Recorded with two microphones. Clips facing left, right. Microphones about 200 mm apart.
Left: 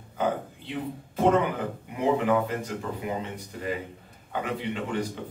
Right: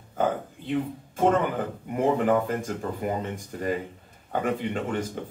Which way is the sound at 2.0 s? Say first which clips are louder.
Right 1 dB; 45° right (ahead or behind).